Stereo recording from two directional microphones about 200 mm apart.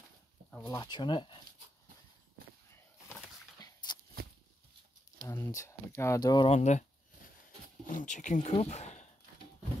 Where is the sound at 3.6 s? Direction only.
20° left (ahead or behind).